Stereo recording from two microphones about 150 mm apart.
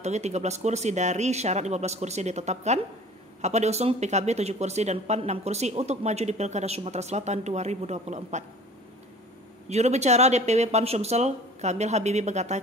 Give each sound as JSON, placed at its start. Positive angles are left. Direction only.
{"t": 0.0, "sound": "speech", "side_deg": -50}
{"t": 9.7, "sound": "speech", "side_deg": -45}